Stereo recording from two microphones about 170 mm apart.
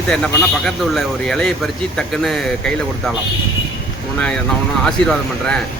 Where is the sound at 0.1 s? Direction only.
5° left (ahead or behind).